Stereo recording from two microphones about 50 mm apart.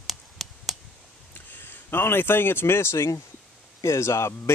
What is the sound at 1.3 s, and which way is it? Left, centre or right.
Speech, left.